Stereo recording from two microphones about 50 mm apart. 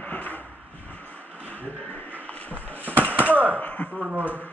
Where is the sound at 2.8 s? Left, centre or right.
Right.